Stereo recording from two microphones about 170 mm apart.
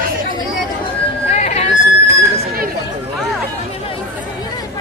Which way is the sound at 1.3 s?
40° left (ahead or behind).